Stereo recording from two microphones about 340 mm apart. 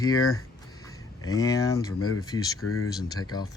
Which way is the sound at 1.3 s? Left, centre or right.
Centre.